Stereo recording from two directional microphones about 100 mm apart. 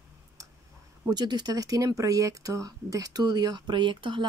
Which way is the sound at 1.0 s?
45° right (ahead or behind).